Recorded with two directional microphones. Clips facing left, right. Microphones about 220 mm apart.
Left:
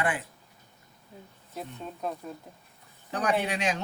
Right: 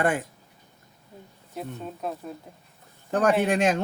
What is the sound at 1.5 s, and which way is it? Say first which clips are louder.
Speech: right 4 dB; 5° right (ahead or behind).